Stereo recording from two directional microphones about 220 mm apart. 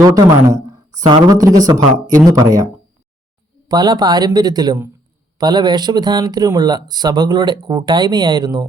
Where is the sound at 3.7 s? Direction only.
20° right (ahead or behind).